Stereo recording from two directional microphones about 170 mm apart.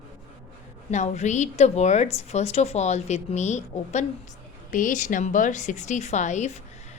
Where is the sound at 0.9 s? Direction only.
45° left (ahead or behind).